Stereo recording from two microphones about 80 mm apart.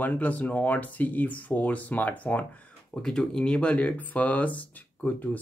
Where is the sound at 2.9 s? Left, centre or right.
Centre.